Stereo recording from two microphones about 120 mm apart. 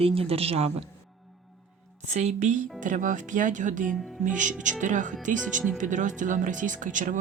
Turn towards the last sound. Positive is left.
turn(degrees=-90)